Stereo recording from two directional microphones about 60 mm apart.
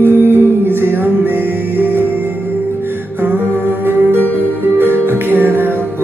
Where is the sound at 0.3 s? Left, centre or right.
Right.